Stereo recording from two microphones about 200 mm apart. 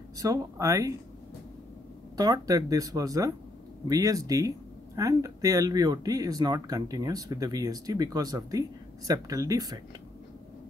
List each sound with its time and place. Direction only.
0.2 s speech: 15° right (ahead or behind)
2.1 s speech: 15° right (ahead or behind)